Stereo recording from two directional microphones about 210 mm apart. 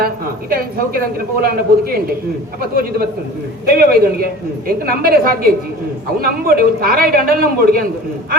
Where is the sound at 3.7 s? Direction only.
45° right (ahead or behind).